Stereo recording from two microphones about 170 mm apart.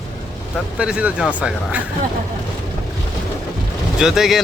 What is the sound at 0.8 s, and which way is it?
Speech, 5° right (ahead or behind).